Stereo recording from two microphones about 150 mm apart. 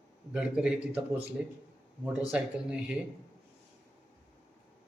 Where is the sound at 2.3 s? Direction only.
5° right (ahead or behind).